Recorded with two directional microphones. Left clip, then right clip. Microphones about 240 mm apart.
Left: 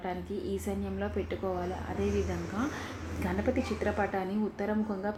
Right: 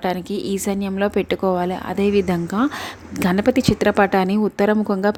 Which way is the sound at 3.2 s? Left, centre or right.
Right.